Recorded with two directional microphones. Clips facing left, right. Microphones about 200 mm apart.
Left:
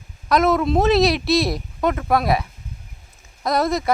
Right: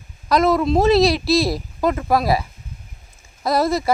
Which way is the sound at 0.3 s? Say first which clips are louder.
Right 1 dB; centre (ahead or behind).